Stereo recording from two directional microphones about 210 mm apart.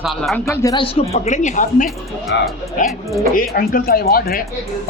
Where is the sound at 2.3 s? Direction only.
55° left (ahead or behind).